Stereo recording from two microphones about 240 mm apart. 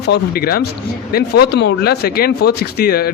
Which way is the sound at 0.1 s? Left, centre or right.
Left.